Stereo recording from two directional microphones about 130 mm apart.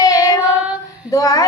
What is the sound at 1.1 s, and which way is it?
Child singing, 25° left (ahead or behind).